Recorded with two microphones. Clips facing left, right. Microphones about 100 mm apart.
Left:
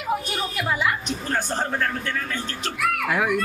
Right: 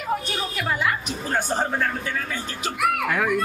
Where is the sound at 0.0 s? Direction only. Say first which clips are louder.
Left 1 dB; 5° left (ahead or behind).